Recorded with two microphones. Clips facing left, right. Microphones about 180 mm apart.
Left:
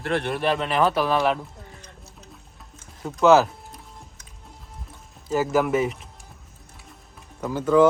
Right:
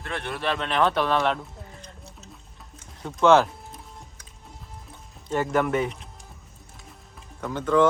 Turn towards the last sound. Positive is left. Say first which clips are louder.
# left 3 dB
turn(degrees=5)  # may be behind; listen again after turning